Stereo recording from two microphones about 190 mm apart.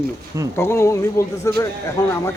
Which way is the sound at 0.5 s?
15° left (ahead or behind).